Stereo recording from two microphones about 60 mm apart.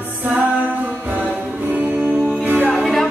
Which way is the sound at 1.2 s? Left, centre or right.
Right.